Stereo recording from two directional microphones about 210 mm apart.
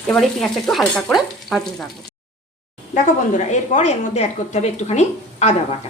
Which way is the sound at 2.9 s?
35° left (ahead or behind).